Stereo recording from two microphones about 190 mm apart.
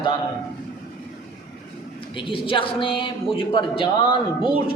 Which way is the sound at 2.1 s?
25° left (ahead or behind).